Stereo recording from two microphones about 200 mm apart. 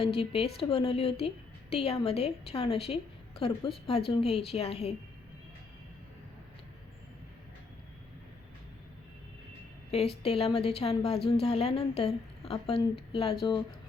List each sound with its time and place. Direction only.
0.0 s a woman's voice: 30° left (ahead or behind)
9.9 s a woman's voice: 30° left (ahead or behind)